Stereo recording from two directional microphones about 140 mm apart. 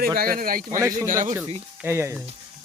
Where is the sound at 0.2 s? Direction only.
90° right.